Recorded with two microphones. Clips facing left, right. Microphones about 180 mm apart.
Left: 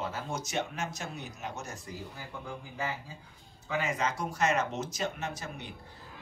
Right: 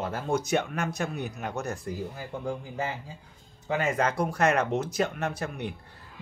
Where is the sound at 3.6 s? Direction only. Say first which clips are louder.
Right 5 dB; 55° right (ahead or behind).